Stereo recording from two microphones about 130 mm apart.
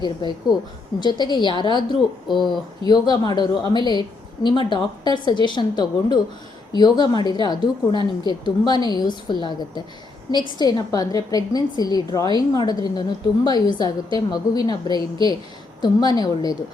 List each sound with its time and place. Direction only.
0.0 s a woman's voice: 35° left (ahead or behind)